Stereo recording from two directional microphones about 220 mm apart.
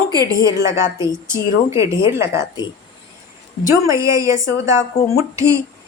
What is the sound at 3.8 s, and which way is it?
A woman's voice, 15° right (ahead or behind).